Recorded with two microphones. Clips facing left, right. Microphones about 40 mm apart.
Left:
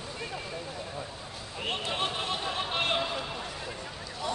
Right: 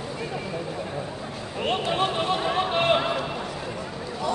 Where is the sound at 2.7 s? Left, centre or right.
Centre.